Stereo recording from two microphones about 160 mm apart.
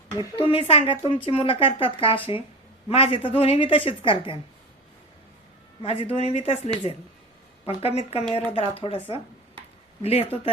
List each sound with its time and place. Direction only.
0.3 s speech: 35° left (ahead or behind)
5.8 s speech: 40° left (ahead or behind)